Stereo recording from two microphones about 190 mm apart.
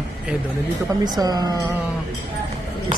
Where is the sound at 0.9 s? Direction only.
20° right (ahead or behind).